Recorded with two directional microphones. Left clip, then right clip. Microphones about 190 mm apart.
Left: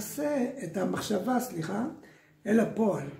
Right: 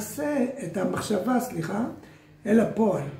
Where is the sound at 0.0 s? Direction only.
20° left (ahead or behind).